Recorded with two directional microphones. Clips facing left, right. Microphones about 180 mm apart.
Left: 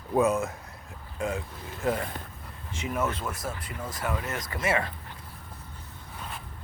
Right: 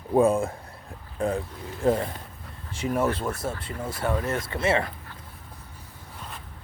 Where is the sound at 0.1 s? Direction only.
30° right (ahead or behind).